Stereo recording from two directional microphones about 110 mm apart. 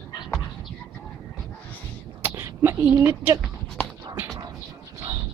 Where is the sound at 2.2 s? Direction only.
20° right (ahead or behind).